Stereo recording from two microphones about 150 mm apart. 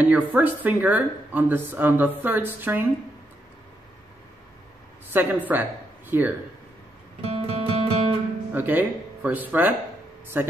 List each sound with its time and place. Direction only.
0.0 s speech: 10° right (ahead or behind)
5.1 s speech: 15° right (ahead or behind)
7.2 s music: 40° right (ahead or behind)
8.5 s speech: 10° right (ahead or behind)